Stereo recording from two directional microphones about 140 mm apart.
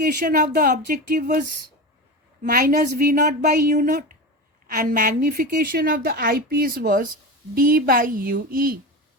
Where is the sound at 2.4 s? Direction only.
90° right.